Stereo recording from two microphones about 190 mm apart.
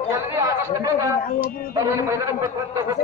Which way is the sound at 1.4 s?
50° left (ahead or behind).